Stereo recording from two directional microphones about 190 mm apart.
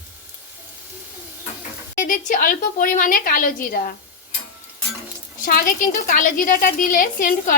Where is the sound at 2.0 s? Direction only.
45° left (ahead or behind).